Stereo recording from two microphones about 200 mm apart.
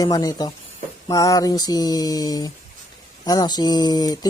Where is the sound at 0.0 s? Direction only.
20° left (ahead or behind).